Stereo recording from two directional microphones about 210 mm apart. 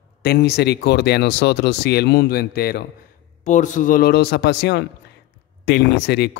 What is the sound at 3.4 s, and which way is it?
Speech, 35° left (ahead or behind).